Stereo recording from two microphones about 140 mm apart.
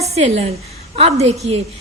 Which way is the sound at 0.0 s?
50° right (ahead or behind).